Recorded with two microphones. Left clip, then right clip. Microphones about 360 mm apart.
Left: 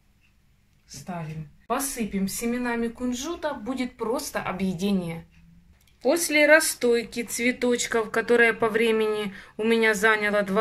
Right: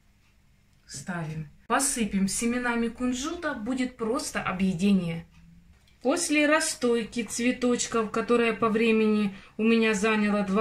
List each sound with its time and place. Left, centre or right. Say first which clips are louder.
1.7 s a woman's voice: right 2 dB; centre